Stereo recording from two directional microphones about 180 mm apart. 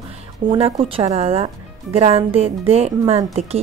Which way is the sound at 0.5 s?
35° right (ahead or behind).